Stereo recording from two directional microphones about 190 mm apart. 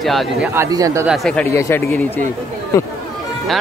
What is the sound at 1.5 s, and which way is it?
Speech, 15° left (ahead or behind).